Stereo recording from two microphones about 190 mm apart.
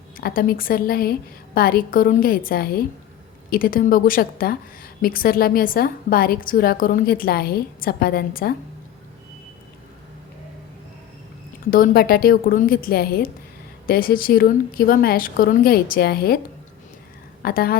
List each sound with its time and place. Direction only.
0.2 s a woman's voice: 50° left (ahead or behind)
11.7 s a woman's voice: 50° left (ahead or behind)
17.4 s a woman's voice: 50° left (ahead or behind)